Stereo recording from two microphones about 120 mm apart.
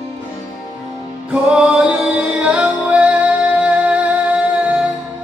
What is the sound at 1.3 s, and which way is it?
Music, 5° right (ahead or behind).